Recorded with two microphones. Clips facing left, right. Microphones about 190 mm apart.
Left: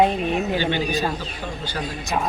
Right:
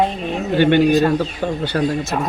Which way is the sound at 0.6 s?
60° right (ahead or behind).